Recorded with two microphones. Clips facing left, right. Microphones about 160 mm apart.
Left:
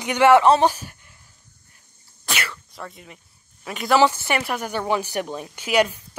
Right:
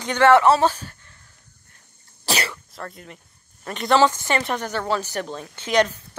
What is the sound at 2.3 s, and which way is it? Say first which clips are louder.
Speech: right 4 dB; 30° right (ahead or behind).